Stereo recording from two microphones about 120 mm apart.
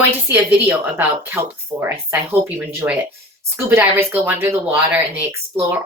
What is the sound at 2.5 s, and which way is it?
Speech, 15° right (ahead or behind).